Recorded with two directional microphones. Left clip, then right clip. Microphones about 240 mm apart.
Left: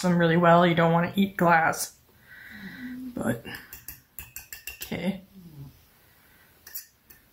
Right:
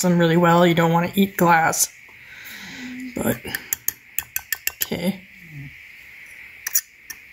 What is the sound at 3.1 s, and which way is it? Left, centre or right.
Speech, right.